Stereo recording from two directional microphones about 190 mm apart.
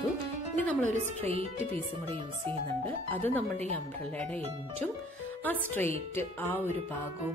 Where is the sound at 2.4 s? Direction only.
10° left (ahead or behind).